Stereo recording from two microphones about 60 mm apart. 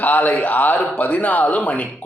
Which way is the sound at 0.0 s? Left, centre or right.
Left.